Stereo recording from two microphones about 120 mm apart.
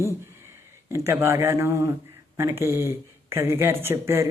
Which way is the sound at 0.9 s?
20° right (ahead or behind).